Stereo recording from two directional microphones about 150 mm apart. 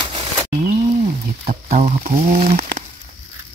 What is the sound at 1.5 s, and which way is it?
Speech, 50° right (ahead or behind).